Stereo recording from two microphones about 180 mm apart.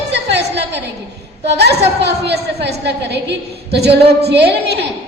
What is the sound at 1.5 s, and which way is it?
A woman's voice, 65° right (ahead or behind).